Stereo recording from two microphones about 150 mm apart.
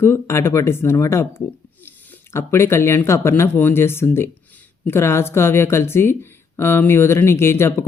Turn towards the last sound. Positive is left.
turn(degrees=15)  # may be behind; listen again after turning